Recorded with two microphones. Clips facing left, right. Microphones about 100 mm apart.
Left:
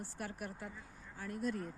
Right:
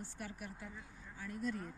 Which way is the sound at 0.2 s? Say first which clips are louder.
Left 5 dB; 50° left (ahead or behind).